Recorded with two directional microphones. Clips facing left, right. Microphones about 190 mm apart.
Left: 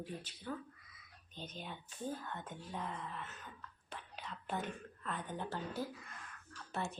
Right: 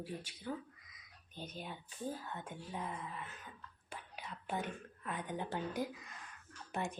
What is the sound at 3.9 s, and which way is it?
Whispering, 10° right (ahead or behind).